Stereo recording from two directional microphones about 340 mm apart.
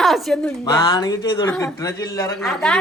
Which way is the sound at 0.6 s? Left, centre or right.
Centre.